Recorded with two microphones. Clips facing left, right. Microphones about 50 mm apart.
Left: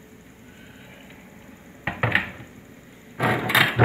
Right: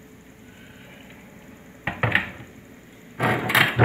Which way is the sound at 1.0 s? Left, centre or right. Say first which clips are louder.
Even; centre.